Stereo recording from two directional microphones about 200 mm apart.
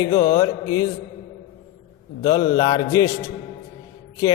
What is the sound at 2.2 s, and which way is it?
Mantra, 20° left (ahead or behind).